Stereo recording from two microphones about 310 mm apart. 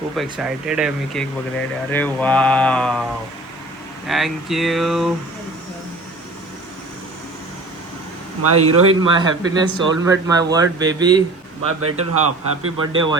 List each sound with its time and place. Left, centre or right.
0.2 s speech: centre
4.0 s speech: centre
8.4 s a man's voice: right
9.0 s speech: centre
11.8 s a man's voice: right